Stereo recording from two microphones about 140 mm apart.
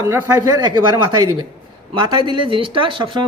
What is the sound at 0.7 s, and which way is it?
Speech, 30° right (ahead or behind).